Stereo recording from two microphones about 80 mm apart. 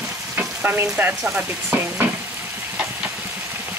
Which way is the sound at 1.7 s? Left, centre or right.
Right.